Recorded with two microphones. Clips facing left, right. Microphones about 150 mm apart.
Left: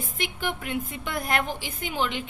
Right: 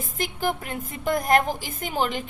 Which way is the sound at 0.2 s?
40° right (ahead or behind).